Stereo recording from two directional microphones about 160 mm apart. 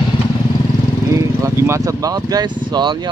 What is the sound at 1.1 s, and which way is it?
Speech, 20° right (ahead or behind).